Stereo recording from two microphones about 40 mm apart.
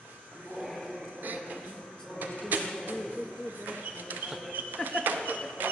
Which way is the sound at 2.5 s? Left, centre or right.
Right.